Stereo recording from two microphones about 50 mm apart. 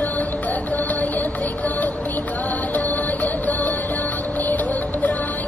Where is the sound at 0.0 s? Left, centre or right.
Left.